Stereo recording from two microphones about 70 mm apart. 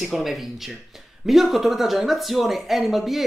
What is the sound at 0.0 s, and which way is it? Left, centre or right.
Speech, centre.